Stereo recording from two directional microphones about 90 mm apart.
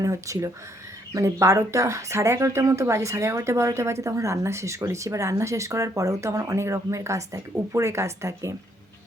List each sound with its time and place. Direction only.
0.0 s speech: 35° right (ahead or behind)